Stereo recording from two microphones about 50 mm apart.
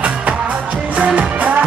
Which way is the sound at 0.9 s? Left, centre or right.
Right.